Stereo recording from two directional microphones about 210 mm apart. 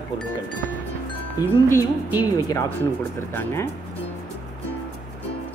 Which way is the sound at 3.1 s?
10° left (ahead or behind).